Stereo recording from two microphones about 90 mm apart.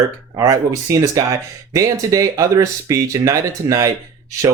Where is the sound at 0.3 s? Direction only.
40° right (ahead or behind).